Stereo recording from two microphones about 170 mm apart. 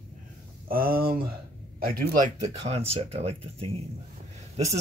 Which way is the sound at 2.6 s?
35° right (ahead or behind).